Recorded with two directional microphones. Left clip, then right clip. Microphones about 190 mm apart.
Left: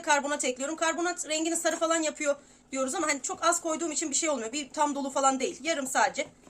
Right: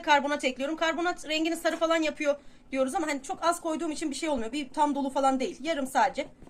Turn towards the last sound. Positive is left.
turn(degrees=-10)  # may be behind; listen again after turning